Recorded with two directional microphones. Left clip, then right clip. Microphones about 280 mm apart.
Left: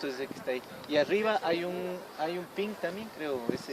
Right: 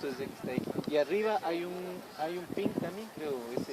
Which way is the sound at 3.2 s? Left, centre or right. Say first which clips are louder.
Left 2 dB; left.